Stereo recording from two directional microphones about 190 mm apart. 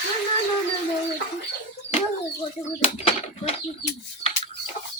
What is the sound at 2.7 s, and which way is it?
Bird, 30° left (ahead or behind).